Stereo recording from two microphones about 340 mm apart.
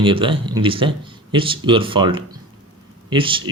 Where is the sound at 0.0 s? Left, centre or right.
Centre.